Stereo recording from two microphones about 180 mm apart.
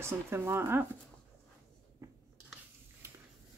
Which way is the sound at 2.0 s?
15° right (ahead or behind).